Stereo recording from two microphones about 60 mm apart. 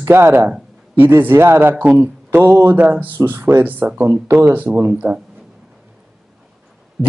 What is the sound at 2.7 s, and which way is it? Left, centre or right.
Speech, right.